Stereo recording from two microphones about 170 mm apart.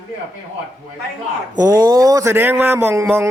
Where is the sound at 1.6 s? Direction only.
20° right (ahead or behind).